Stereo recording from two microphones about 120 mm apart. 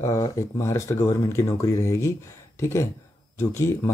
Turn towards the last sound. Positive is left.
turn(degrees=25)  # may be behind; listen again after turning